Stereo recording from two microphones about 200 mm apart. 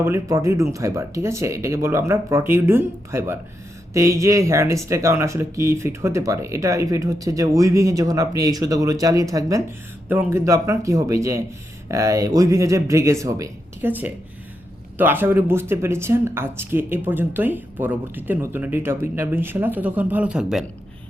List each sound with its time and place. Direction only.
0.0 s speech: 15° right (ahead or behind)